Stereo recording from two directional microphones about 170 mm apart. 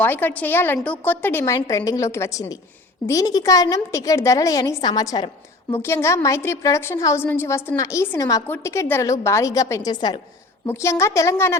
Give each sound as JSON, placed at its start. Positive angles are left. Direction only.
{"t": 0.0, "sound": "a woman's voice", "side_deg": 10}